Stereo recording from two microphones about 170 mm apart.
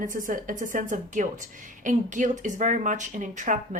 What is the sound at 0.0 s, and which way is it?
A woman's voice, 50° right (ahead or behind).